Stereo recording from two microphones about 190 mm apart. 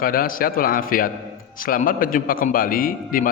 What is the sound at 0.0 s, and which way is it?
Speech, 50° left (ahead or behind).